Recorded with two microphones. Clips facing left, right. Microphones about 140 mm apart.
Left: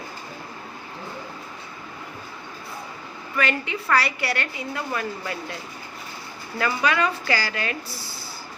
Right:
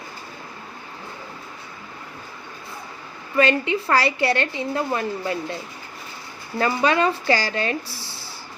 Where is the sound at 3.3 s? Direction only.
25° right (ahead or behind).